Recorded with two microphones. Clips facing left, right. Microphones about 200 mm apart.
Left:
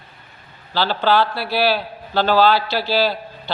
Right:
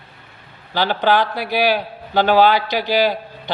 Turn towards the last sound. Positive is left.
turn(degrees=-15)  # may be behind; listen again after turning